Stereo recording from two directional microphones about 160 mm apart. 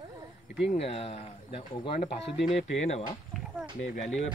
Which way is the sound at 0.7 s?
40° left (ahead or behind).